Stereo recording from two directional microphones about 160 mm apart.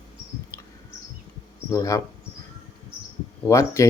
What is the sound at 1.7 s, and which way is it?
Speech, 20° left (ahead or behind).